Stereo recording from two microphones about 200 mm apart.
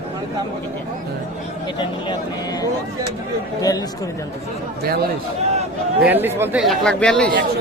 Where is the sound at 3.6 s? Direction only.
20° left (ahead or behind).